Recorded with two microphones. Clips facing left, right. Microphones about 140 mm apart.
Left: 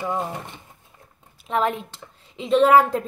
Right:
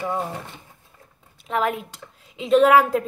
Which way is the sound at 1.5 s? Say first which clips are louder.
Left 1 dB; 5° right (ahead or behind).